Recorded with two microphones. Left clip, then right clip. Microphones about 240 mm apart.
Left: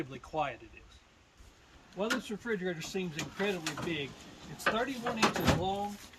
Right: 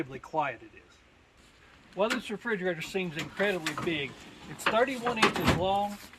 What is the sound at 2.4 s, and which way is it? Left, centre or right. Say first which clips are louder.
Speech: right 4 dB; centre.